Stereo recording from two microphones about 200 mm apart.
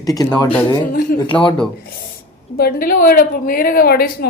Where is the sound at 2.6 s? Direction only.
45° left (ahead or behind).